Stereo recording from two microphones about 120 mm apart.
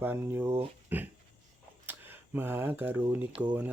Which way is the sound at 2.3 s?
20° right (ahead or behind).